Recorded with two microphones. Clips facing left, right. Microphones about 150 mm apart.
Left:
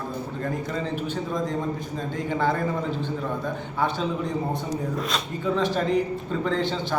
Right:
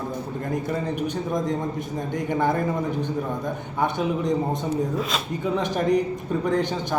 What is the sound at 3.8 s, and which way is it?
Speech, 15° right (ahead or behind).